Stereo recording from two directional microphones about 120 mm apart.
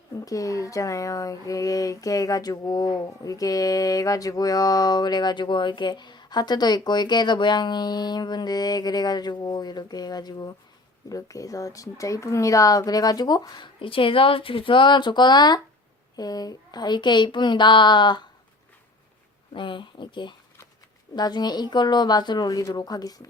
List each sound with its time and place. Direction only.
0.3 s speech: 30° left (ahead or behind)
19.5 s speech: 40° left (ahead or behind)